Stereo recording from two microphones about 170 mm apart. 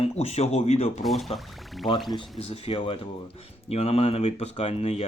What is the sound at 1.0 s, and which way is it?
Speech, centre (ahead or behind).